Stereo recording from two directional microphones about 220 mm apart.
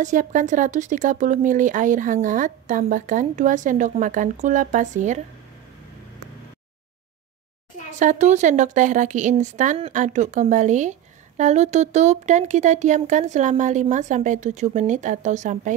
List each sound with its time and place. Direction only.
0.0 s speech: 35° right (ahead or behind)
8.0 s speech: 35° right (ahead or behind)